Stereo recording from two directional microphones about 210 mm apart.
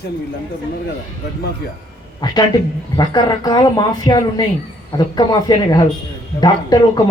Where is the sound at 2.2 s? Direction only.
20° left (ahead or behind).